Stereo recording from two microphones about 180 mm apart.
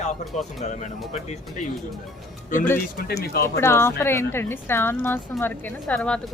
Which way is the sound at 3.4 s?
15° left (ahead or behind).